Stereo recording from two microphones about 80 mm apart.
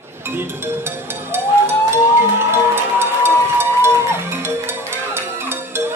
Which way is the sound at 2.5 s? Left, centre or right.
Right.